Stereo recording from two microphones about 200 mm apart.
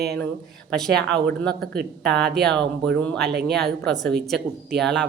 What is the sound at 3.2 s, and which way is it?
Speech, 55° right (ahead or behind).